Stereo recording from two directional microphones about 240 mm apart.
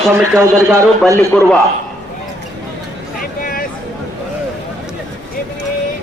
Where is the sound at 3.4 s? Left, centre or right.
Left.